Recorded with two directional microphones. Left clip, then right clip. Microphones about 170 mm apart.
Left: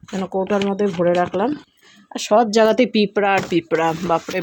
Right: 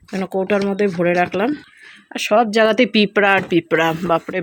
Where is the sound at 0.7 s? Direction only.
15° right (ahead or behind).